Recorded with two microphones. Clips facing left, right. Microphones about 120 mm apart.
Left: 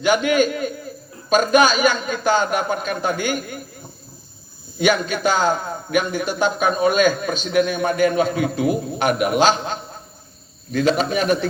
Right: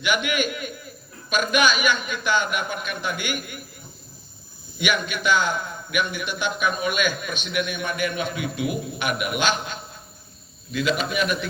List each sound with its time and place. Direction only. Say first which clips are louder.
0.0 s a man's voice: left 7 dB; 40° left (ahead or behind)
4.8 s a man's voice: left 7 dB; 40° left (ahead or behind)